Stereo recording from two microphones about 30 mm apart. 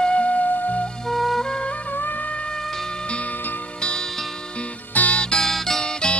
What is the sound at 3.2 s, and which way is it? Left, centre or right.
Music, left.